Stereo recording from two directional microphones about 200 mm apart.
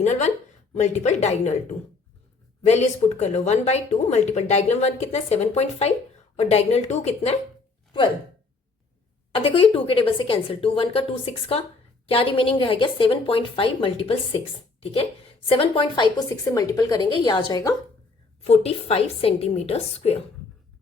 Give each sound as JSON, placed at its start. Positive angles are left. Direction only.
{"t": 0.0, "sound": "speech", "side_deg": 35}
{"t": 2.6, "sound": "a woman's voice", "side_deg": 35}
{"t": 9.3, "sound": "speech", "side_deg": 25}
{"t": 18.4, "sound": "a woman's voice", "side_deg": 30}